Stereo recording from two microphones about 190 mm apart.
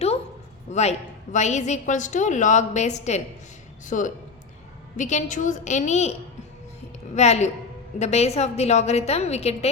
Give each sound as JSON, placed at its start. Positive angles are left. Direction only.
{"t": 0.7, "sound": "a woman's voice", "side_deg": 35}
{"t": 7.2, "sound": "a woman's voice", "side_deg": 35}